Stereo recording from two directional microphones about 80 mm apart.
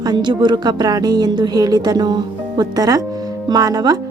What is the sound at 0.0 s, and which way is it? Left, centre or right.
A woman's voice, right.